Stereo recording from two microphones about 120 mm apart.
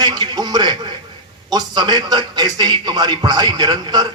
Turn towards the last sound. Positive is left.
turn(degrees=-35)  # may be behind; listen again after turning